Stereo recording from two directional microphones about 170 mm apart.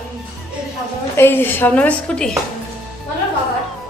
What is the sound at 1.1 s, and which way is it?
A woman's voice, 10° left (ahead or behind).